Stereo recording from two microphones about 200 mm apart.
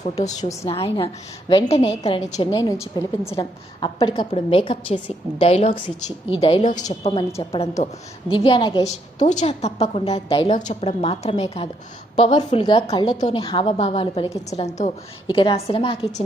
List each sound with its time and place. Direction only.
0.0 s a woman's voice: 35° left (ahead or behind); by 3.3 s 15° left (ahead or behind)
3.3 s a woman's voice: 25° left (ahead or behind)
7.0 s a woman's voice: 25° left (ahead or behind)
8.4 s a woman's voice: 25° left (ahead or behind)
9.1 s a woman's voice: 35° left (ahead or behind)